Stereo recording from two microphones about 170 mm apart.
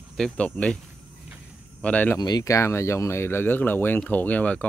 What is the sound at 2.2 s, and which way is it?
Speech, 25° left (ahead or behind).